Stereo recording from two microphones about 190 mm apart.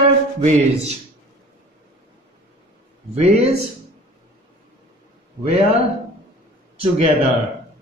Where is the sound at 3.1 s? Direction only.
35° right (ahead or behind).